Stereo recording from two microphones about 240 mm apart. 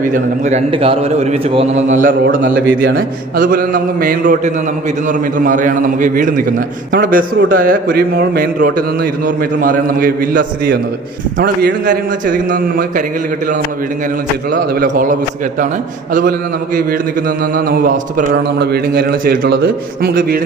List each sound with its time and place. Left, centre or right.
0.0 s a man's voice: right
2.2 s a man's voice: right
2.9 s a man's voice: right
14.5 s a man's voice: right
17.2 s a man's voice: right